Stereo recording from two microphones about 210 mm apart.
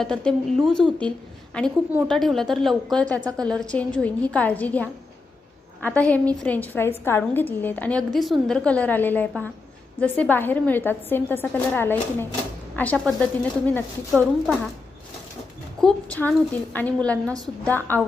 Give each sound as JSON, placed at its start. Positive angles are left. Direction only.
{"t": 0.0, "sound": "a woman's voice", "side_deg": 5}
{"t": 15.8, "sound": "a woman's voice", "side_deg": 5}